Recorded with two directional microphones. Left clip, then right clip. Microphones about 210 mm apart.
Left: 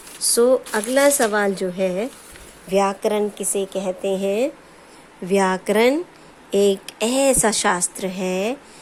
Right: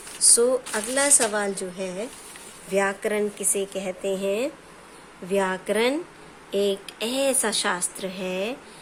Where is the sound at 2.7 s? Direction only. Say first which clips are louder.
Left 5 dB; 20° left (ahead or behind).